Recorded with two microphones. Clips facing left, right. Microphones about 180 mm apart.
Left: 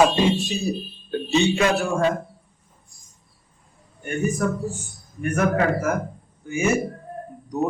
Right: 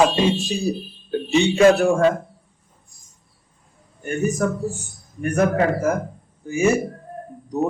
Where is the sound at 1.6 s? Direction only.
60° right (ahead or behind).